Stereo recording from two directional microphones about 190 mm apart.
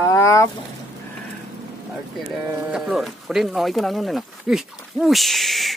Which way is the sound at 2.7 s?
5° right (ahead or behind).